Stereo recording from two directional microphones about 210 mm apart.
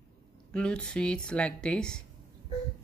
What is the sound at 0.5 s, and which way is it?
Speech, 5° left (ahead or behind).